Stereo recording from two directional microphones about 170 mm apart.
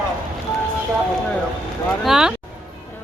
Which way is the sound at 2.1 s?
5° right (ahead or behind).